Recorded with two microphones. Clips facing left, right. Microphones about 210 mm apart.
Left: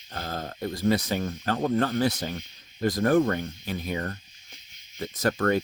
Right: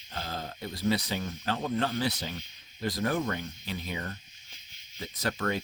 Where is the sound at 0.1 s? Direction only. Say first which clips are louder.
Left 3 dB; 50° left (ahead or behind).